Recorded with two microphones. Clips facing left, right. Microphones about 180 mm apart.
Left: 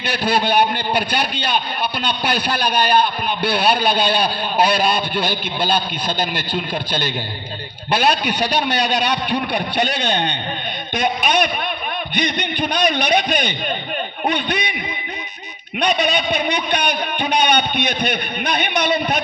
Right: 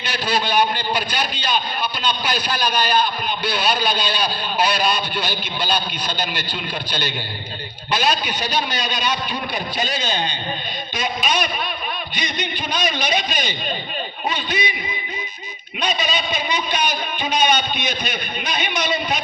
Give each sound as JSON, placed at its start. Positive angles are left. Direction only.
{"t": 0.0, "sound": "a man's voice", "side_deg": 55}
{"t": 15.8, "sound": "a man's voice", "side_deg": 65}